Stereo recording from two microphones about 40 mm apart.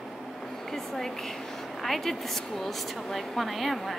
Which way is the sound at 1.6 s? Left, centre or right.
Centre.